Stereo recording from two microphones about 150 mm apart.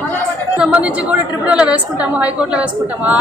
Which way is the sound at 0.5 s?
10° right (ahead or behind).